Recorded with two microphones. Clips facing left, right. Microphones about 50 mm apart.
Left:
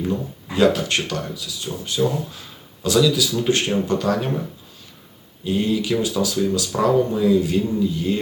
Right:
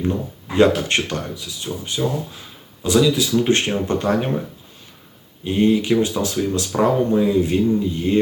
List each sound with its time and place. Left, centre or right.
0.1 s speech: right
5.5 s speech: right